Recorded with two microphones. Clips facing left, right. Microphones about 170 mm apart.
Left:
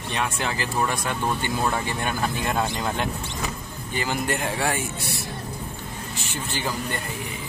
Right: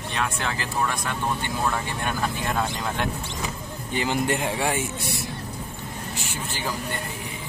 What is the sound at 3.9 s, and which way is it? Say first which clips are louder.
Speech: right 2 dB; 20° right (ahead or behind).